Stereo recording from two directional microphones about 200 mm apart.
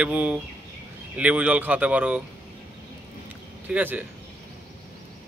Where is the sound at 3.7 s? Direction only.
10° right (ahead or behind).